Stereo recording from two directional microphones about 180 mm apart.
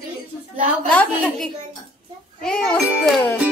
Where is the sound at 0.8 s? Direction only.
5° left (ahead or behind).